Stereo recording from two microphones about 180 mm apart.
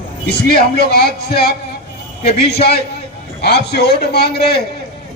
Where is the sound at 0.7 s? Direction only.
65° left (ahead or behind).